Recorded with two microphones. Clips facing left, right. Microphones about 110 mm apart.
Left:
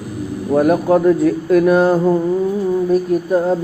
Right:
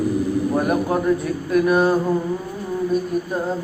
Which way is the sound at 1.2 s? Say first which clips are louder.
Left 6 dB; 90° left.